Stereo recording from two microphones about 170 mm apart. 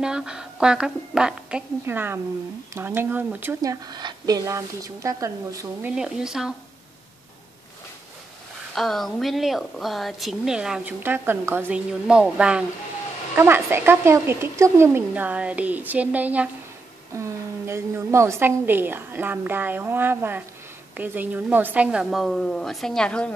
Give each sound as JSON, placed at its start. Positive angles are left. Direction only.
{"t": 0.0, "sound": "a woman's voice", "side_deg": -5}
{"t": 3.8, "sound": "a woman's voice", "side_deg": -25}
{"t": 5.9, "sound": "a woman's voice", "side_deg": -5}
{"t": 8.7, "sound": "a woman's voice", "side_deg": 0}